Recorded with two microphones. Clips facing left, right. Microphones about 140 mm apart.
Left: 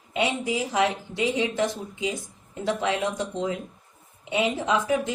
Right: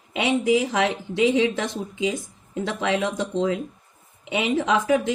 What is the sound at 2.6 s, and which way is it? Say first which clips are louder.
Speech: right 1 dB; 70° right (ahead or behind).